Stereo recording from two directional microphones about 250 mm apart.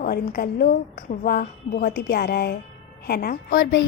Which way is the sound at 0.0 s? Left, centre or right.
Left.